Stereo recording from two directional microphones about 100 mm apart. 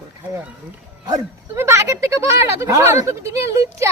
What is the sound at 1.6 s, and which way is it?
Speech, 30° right (ahead or behind).